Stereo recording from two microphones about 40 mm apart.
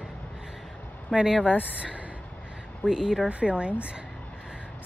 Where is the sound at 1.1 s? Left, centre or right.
Centre.